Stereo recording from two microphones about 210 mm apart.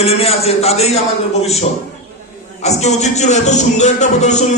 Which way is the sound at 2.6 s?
30° left (ahead or behind).